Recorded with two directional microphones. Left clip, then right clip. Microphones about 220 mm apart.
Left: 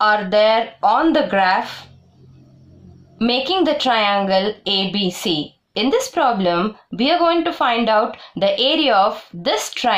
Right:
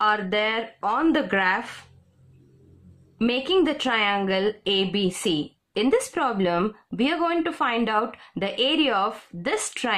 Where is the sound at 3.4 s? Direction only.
25° right (ahead or behind).